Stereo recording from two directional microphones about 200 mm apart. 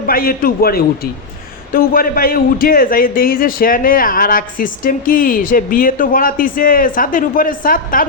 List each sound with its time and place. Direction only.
0.1 s a man's voice: 45° left (ahead or behind)